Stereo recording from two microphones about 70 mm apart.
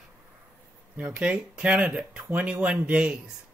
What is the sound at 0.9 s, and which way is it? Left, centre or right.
Speech, centre.